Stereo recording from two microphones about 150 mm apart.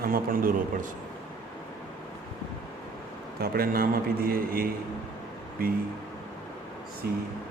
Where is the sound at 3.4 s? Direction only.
85° right.